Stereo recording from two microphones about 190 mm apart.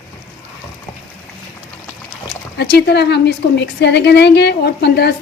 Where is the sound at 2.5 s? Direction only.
60° left (ahead or behind).